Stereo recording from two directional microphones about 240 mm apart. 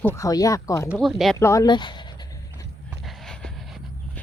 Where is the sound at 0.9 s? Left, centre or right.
Centre.